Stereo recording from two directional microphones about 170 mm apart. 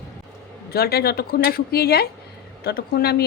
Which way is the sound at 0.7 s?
65° left (ahead or behind).